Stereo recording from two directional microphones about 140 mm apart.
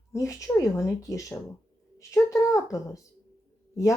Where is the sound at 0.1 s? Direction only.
20° left (ahead or behind).